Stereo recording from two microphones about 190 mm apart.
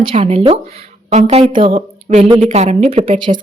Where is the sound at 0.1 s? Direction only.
30° right (ahead or behind).